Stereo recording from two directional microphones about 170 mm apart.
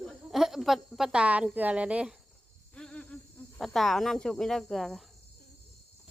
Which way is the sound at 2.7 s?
5° left (ahead or behind).